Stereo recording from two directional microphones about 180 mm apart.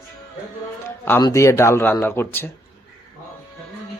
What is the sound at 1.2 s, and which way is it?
Speech, 20° left (ahead or behind).